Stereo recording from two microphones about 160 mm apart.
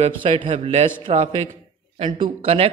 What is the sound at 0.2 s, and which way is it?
Speech, 35° right (ahead or behind).